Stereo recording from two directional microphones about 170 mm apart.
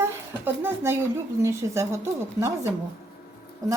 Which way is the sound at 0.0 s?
15° right (ahead or behind).